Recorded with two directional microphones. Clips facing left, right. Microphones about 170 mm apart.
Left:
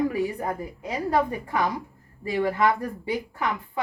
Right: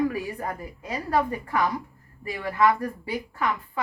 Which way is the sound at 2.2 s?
25° left (ahead or behind).